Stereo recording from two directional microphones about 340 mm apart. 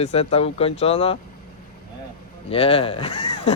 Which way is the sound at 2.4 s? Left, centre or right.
Centre.